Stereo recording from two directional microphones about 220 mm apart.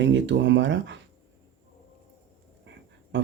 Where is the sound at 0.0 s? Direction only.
55° right (ahead or behind).